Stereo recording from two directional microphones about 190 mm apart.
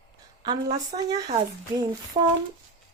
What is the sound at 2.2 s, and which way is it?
Speech, 30° right (ahead or behind).